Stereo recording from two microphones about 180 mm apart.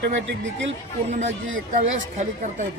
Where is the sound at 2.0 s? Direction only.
40° right (ahead or behind).